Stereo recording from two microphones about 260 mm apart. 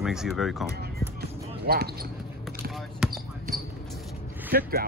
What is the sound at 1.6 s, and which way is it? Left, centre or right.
Speech, right.